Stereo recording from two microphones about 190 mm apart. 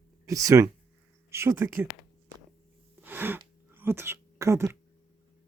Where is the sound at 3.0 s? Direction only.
10° right (ahead or behind).